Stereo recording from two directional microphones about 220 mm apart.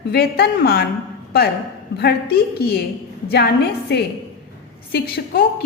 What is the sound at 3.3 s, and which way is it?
A woman's voice, 45° left (ahead or behind).